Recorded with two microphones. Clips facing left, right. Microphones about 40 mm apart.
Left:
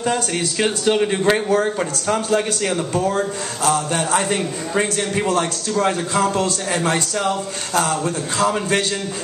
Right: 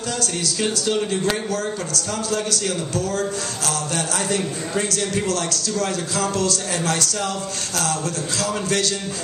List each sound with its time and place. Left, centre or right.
0.1 s a man's voice: left